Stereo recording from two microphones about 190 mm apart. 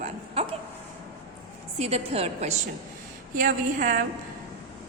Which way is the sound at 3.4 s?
45° right (ahead or behind).